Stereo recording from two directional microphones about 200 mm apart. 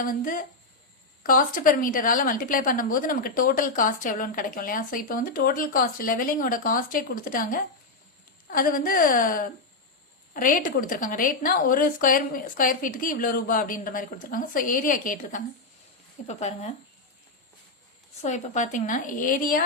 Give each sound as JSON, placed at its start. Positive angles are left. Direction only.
{"t": 0.0, "sound": "a woman's voice", "side_deg": 45}
{"t": 18.2, "sound": "a woman's voice", "side_deg": 35}